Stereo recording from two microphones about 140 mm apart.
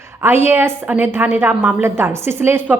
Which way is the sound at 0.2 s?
15° right (ahead or behind).